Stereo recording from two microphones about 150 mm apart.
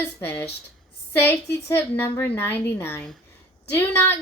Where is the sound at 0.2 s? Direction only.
15° left (ahead or behind).